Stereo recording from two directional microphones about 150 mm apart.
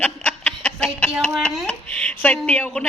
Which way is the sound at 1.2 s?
5° left (ahead or behind).